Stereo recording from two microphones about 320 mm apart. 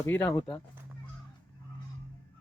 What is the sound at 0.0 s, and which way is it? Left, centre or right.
Speech, centre.